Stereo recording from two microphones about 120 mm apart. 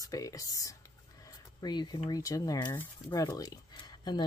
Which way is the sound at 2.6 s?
15° left (ahead or behind).